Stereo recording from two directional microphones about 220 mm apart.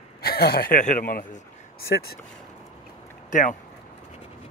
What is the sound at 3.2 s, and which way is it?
Speech, 35° left (ahead or behind).